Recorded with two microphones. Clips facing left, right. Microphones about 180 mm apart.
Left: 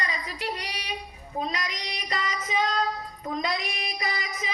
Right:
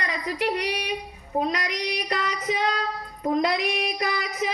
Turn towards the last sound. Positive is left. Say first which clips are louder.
# right 5 dB
turn(degrees=-65)  # may be behind; listen again after turning